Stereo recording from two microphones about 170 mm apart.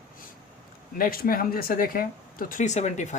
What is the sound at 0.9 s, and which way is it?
Speech, 60° left (ahead or behind).